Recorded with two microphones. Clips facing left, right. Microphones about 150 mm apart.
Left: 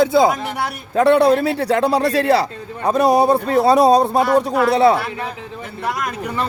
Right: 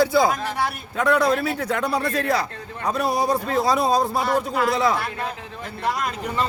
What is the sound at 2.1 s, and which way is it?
A man's voice, 80° left.